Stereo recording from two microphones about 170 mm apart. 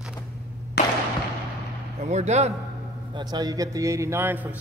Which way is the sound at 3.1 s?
25° right (ahead or behind).